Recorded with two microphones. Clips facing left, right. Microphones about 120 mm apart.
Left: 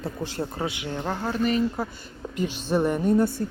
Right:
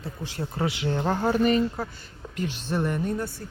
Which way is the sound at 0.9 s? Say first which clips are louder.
Right 3 dB; 10° right (ahead or behind).